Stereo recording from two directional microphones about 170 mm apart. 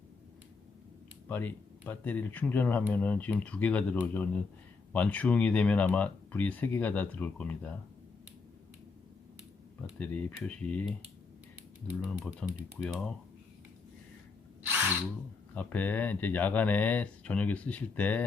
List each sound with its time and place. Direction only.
1.3 s speech: 10° left (ahead or behind)
10.0 s speech: 10° left (ahead or behind)
11.9 s speech: 10° right (ahead or behind)
12.4 s speech: 5° left (ahead or behind)
15.5 s speech: 10° left (ahead or behind)